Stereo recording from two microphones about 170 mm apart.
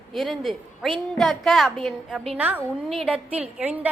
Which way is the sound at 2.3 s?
10° right (ahead or behind).